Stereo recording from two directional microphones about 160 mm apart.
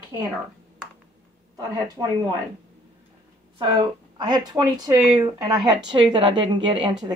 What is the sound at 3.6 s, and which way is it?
Speech, 30° right (ahead or behind).